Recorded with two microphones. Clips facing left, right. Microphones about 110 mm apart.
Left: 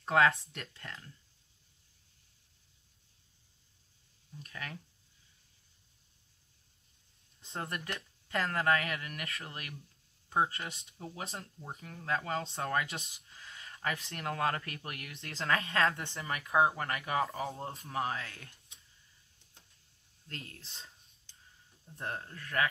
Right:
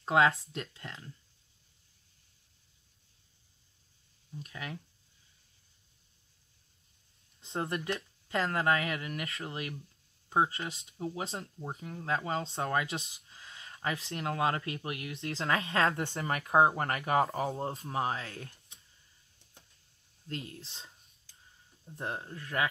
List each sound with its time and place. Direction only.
0.0 s speech: 25° right (ahead or behind)
4.4 s speech: 20° right (ahead or behind)
7.4 s speech: 25° right (ahead or behind)
20.2 s speech: 20° right (ahead or behind)
21.9 s speech: 20° right (ahead or behind)